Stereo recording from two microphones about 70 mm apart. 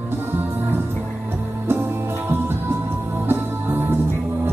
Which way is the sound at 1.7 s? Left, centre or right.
Right.